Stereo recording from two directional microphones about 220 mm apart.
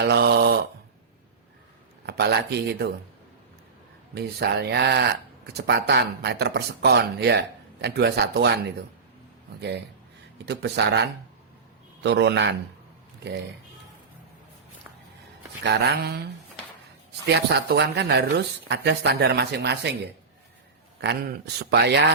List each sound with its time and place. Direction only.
0.0 s mantra: 50° right (ahead or behind)
2.0 s speech: 50° right (ahead or behind)
4.1 s speech: 50° right (ahead or behind)
9.6 s speech: 50° right (ahead or behind)
15.6 s speech: 45° right (ahead or behind)
17.2 s speech: 50° right (ahead or behind)
21.0 s speech: 45° right (ahead or behind)